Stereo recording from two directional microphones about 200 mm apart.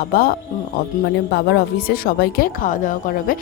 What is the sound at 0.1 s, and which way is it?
Speech, 45° left (ahead or behind).